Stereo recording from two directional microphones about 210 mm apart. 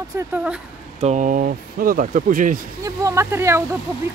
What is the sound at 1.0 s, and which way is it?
Speech, 35° right (ahead or behind).